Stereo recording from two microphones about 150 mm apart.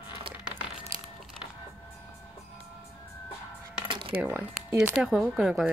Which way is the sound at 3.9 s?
35° right (ahead or behind).